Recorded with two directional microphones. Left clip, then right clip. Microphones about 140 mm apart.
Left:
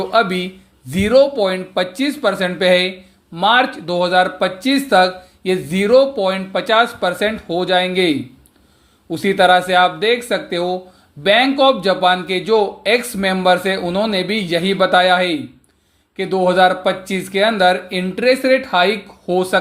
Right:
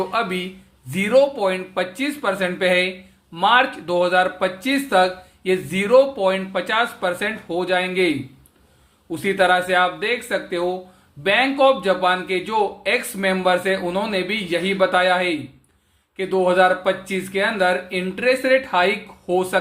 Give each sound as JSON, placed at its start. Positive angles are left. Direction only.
{"t": 0.1, "sound": "speech", "side_deg": 30}
{"t": 9.1, "sound": "speech", "side_deg": 30}